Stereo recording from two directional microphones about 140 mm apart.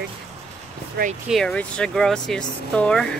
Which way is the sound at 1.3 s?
5° left (ahead or behind).